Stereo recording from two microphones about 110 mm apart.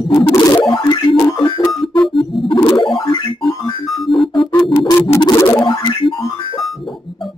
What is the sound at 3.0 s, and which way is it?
Music, 40° left (ahead or behind).